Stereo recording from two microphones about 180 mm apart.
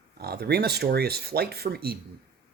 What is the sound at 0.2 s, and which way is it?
Speech, 60° right (ahead or behind).